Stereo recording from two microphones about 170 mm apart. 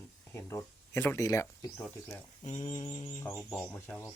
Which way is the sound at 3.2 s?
15° left (ahead or behind).